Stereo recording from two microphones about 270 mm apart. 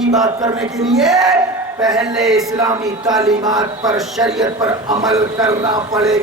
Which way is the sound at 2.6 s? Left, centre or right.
Centre.